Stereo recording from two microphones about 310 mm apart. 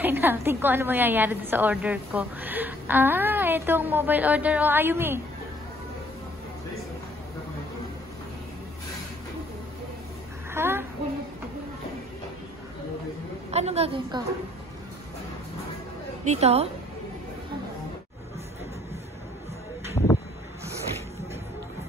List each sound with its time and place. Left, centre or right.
0.0 s a woman's voice: centre
10.5 s a sound: centre
13.5 s a woman's voice: right
16.3 s a woman's voice: centre